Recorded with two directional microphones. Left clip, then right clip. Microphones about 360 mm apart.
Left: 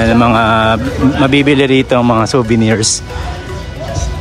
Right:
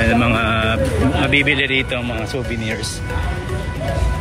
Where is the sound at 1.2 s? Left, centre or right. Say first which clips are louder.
Left 5 dB; left.